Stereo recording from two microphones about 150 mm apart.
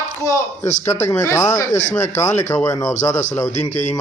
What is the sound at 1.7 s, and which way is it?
Speech, 55° left (ahead or behind).